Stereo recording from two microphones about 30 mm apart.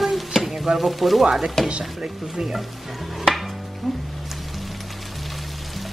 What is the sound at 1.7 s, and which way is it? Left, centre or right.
Speech, right.